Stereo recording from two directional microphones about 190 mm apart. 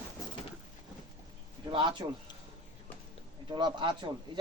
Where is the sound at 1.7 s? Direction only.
25° right (ahead or behind).